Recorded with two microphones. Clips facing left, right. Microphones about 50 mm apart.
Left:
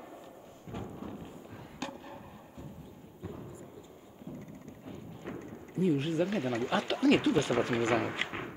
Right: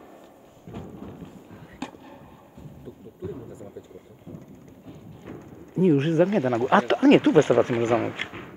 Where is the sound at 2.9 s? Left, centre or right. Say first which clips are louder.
Right 9 dB; right.